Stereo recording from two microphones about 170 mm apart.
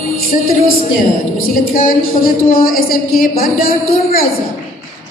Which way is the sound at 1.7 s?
55° left (ahead or behind).